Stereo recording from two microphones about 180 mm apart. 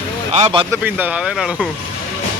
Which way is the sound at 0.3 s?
30° right (ahead or behind).